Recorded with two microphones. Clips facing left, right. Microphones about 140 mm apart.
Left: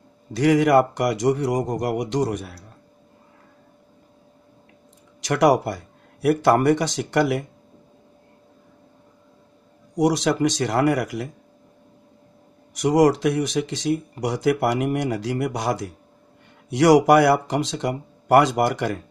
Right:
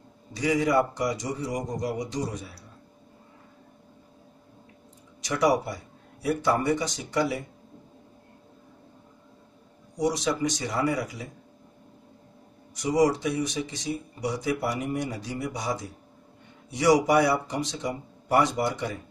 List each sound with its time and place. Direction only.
0.3 s speech: 80° left
5.2 s speech: 85° left
9.9 s speech: 85° left
12.7 s speech: 90° left